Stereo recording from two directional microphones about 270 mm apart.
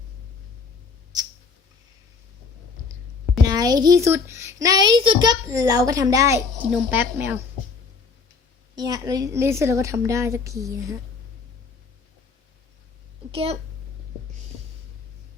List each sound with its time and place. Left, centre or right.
3.4 s a child's voice: centre
8.7 s a child's voice: centre
13.3 s speech: right